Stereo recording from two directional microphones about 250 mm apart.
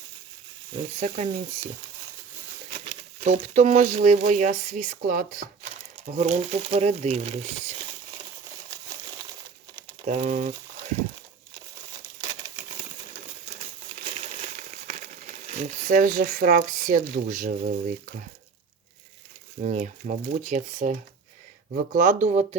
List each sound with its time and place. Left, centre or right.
0.8 s speech: right
3.2 s speech: right
10.1 s speech: right
14.1 s speech: right
19.6 s speech: right
21.9 s speech: right